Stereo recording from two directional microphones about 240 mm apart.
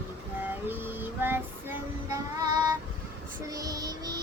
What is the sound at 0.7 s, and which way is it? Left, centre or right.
Child singing, centre.